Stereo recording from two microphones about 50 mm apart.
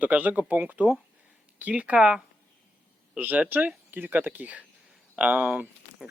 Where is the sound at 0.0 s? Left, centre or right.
Right.